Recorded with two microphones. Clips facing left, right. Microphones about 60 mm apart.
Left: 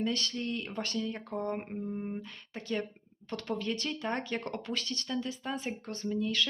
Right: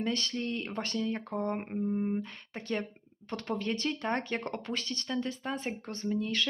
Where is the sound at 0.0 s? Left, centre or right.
Right.